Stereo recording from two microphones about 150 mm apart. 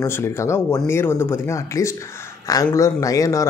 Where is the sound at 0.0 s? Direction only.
15° left (ahead or behind).